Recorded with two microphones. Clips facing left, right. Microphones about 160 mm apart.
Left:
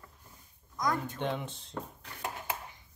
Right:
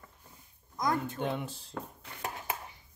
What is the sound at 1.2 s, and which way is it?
Speech, 5° right (ahead or behind).